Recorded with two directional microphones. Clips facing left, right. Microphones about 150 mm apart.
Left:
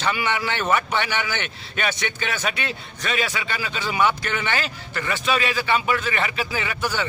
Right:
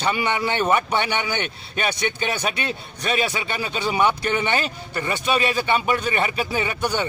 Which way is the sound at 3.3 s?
25° right (ahead or behind).